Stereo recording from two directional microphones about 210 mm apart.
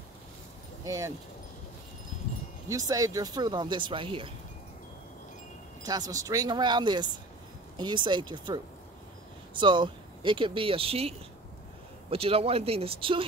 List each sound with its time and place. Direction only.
0.8 s speech: 15° right (ahead or behind)
2.7 s speech: 15° right (ahead or behind)
5.8 s speech: 20° right (ahead or behind)
9.6 s speech: 20° right (ahead or behind)